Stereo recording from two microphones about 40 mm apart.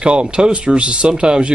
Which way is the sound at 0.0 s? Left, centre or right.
Right.